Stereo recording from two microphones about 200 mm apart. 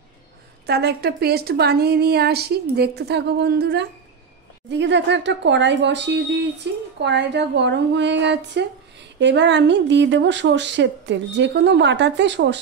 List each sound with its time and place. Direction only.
0.7 s a woman's voice: 55° right (ahead or behind)